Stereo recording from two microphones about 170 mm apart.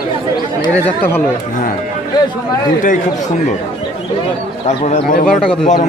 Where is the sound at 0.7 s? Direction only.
10° left (ahead or behind).